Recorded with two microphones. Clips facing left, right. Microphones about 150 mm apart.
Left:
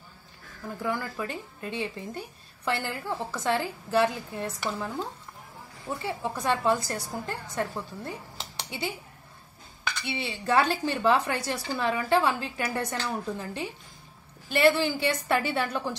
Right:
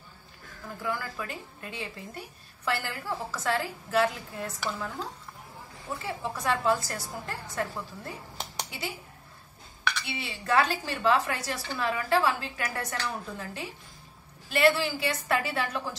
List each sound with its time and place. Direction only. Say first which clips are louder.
0.8 s a woman's voice: left 2 dB; 25° left (ahead or behind)
6.0 s a woman's voice: left 2 dB; 25° left (ahead or behind)
10.0 s a woman's voice: left 7 dB; 25° left (ahead or behind)